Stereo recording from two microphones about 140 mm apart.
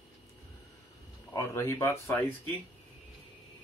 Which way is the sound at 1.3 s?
20° left (ahead or behind).